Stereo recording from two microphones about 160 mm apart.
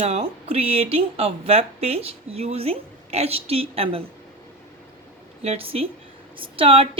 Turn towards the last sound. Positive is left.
turn(degrees=-35)  # may be behind; listen again after turning